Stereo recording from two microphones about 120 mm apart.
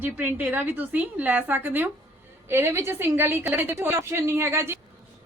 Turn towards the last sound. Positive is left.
turn(degrees=-20)  # may be behind; listen again after turning